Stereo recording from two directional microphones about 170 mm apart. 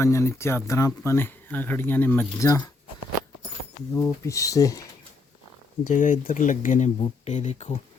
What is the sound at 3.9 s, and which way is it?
Speech, 15° left (ahead or behind).